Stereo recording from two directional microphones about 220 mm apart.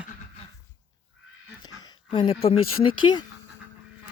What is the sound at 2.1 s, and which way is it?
Speech, 20° left (ahead or behind).